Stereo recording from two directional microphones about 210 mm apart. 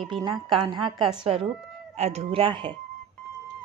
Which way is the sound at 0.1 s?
20° right (ahead or behind).